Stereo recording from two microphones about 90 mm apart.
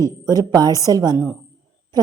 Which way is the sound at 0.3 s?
45° right (ahead or behind).